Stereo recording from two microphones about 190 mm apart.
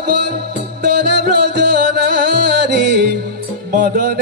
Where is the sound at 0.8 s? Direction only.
65° right (ahead or behind).